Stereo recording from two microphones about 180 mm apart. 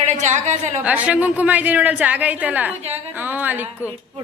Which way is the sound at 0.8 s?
10° right (ahead or behind).